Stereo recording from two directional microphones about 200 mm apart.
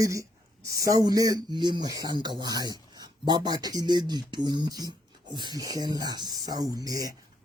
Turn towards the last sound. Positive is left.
turn(degrees=-20)  # may be behind; listen again after turning